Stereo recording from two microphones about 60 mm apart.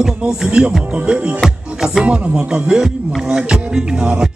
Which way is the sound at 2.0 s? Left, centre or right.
Right.